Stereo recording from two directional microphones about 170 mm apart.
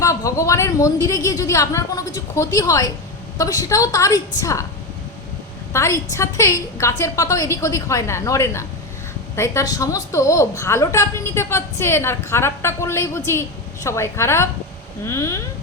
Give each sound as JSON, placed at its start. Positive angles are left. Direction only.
{"t": 0.0, "sound": "a woman's voice", "side_deg": 20}
{"t": 5.7, "sound": "a woman's voice", "side_deg": 15}